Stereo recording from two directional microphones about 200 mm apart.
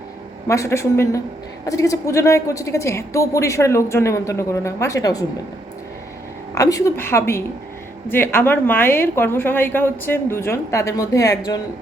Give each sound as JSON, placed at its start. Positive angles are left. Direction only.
{"t": 0.4, "sound": "a woman's voice", "side_deg": 15}
{"t": 6.5, "sound": "a woman's voice", "side_deg": 15}